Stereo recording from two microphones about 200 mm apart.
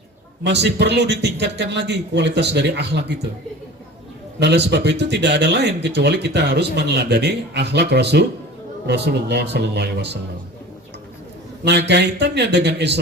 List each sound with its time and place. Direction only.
0.4 s speech: 60° right (ahead or behind)
4.4 s speech: 60° right (ahead or behind)
11.6 s speech: 55° right (ahead or behind)